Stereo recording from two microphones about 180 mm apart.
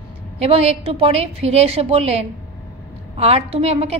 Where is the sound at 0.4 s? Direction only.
35° right (ahead or behind).